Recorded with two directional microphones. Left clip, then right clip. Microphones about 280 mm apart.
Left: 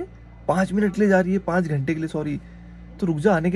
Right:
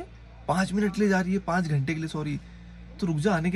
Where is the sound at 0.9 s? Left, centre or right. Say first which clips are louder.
Left 8 dB; centre.